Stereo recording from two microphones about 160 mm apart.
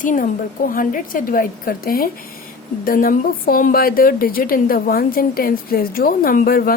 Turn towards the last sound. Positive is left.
turn(degrees=65)  # may be behind; listen again after turning